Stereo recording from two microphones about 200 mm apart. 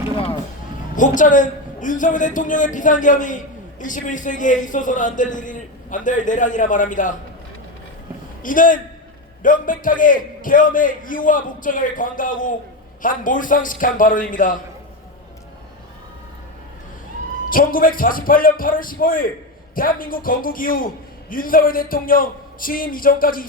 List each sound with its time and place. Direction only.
0.9 s a man's voice: 40° left (ahead or behind)
8.4 s a man's voice: 40° left (ahead or behind)
17.5 s a man's voice: 45° left (ahead or behind)